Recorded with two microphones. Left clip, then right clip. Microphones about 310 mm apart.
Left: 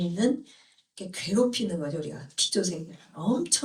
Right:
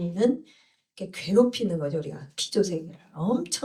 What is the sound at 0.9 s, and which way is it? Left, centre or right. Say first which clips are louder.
Speech: right 5 dB; centre.